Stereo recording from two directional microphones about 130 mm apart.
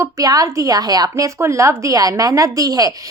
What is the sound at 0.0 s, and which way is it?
A woman's voice, 30° right (ahead or behind).